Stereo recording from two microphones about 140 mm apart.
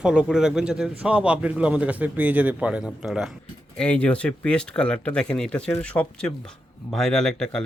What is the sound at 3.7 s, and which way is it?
A man's voice, 10° left (ahead or behind).